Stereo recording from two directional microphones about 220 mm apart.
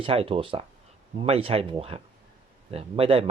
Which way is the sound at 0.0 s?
25° right (ahead or behind).